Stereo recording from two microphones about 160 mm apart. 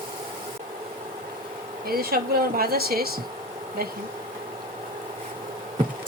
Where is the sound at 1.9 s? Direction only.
70° right (ahead or behind).